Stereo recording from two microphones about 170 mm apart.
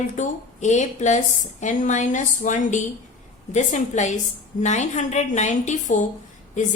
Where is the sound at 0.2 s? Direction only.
45° left (ahead or behind).